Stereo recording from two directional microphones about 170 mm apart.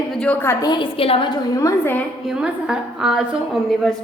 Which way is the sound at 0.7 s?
30° left (ahead or behind).